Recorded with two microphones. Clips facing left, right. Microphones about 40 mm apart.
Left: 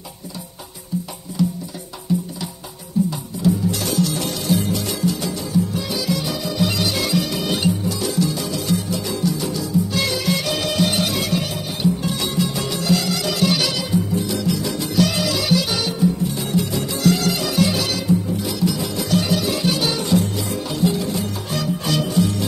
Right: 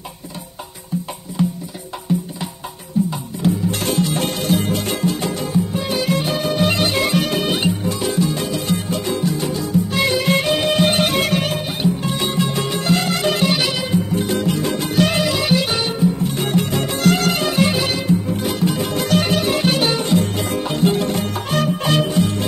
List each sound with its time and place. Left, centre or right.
1.4 s music: right
11.8 s music: right
13.5 s music: right
14.1 s music: right
16.3 s music: right
18.3 s music: right